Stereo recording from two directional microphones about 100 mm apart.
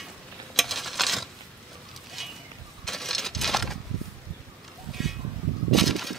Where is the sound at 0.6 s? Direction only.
Centre (ahead or behind).